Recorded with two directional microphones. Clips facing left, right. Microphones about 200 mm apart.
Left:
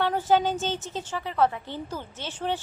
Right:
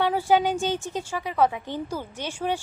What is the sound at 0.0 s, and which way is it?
A woman's voice, 10° right (ahead or behind).